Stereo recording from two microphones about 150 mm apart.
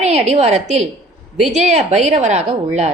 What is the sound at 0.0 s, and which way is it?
A woman's voice, 45° right (ahead or behind).